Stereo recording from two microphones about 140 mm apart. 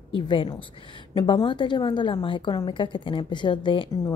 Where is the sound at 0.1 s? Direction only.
35° left (ahead or behind).